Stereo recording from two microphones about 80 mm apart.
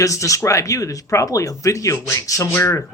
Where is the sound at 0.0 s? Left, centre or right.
Left.